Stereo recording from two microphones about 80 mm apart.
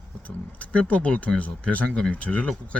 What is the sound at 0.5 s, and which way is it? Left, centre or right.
Speech, centre.